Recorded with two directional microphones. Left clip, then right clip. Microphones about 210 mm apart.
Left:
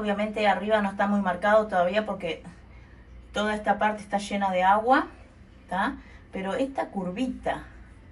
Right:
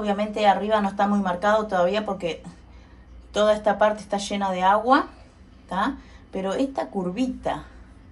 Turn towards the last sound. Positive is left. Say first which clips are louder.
# right 3 dB
turn(degrees=-10)  # may be behind; listen again after turning